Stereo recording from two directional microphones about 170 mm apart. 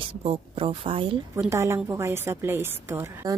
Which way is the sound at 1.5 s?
15° right (ahead or behind).